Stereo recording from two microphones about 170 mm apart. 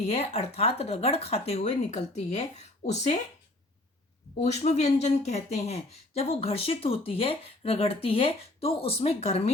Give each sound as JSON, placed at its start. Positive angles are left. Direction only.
{"t": 0.0, "sound": "speech", "side_deg": 35}
{"t": 4.5, "sound": "speech", "side_deg": 40}